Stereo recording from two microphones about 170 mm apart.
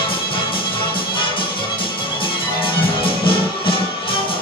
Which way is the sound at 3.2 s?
30° left (ahead or behind).